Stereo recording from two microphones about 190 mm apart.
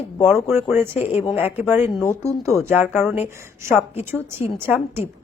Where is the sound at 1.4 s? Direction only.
10° right (ahead or behind).